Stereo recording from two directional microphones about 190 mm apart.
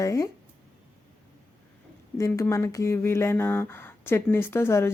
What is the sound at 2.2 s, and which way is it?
Speech, 15° left (ahead or behind).